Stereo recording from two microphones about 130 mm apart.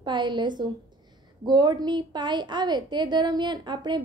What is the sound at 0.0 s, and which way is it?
A woman's voice, 35° right (ahead or behind).